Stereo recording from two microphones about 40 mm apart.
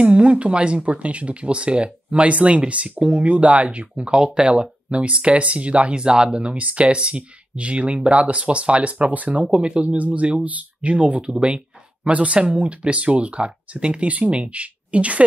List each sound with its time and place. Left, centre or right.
0.0 s speech: right
3.9 s speech: right
6.5 s speech: right